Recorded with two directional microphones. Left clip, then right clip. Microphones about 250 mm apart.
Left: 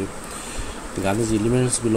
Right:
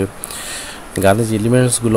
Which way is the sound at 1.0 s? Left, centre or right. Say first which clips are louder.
Right 8 dB; right.